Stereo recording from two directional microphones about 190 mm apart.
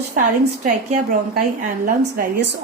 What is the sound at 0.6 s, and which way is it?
A woman's voice, 45° right (ahead or behind).